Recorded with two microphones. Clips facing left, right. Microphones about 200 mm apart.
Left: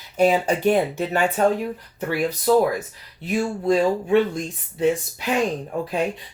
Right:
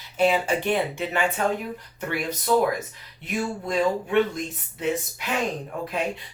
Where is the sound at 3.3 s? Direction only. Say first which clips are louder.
Left 5 dB; 30° left (ahead or behind).